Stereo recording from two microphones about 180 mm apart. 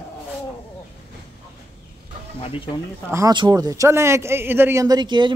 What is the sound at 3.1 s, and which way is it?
A man's voice, 20° right (ahead or behind).